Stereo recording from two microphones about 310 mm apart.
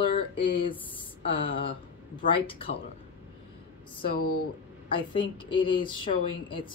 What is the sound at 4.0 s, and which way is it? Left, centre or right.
Speech, left.